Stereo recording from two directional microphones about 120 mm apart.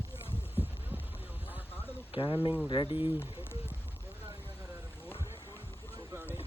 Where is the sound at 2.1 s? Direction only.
45° left (ahead or behind).